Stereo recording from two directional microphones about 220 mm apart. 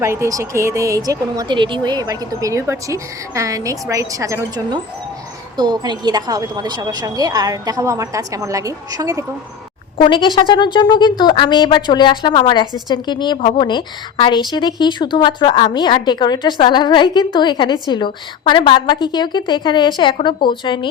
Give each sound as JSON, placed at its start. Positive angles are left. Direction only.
{"t": 0.0, "sound": "a woman's voice", "side_deg": -10}
{"t": 10.0, "sound": "a woman's voice", "side_deg": 20}